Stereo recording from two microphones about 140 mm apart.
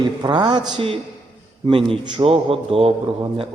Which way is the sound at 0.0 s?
30° right (ahead or behind).